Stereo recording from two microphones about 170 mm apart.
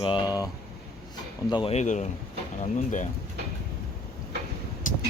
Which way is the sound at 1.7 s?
45° left (ahead or behind).